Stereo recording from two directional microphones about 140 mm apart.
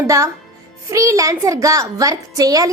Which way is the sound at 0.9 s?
25° right (ahead or behind).